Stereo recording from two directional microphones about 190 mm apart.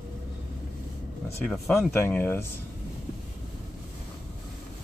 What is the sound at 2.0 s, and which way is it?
Speech, 10° left (ahead or behind).